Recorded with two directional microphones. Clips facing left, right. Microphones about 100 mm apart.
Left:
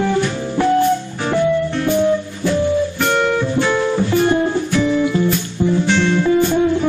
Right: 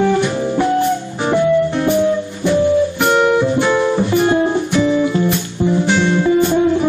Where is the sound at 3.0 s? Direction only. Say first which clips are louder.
Right 4 dB; 15° right (ahead or behind).